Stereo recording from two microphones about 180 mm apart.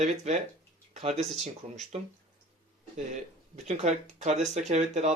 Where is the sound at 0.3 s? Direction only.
35° right (ahead or behind).